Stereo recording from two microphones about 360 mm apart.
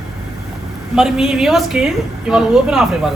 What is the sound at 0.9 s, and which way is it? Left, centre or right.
A woman's voice, centre.